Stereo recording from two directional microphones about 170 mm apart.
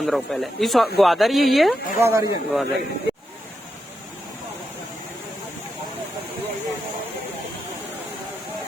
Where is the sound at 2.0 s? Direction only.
15° right (ahead or behind).